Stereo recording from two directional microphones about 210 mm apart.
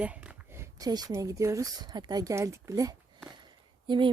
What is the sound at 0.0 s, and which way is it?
Speech, 5° right (ahead or behind).